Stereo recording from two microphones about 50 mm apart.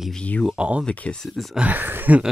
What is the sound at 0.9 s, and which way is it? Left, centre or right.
Speech, left.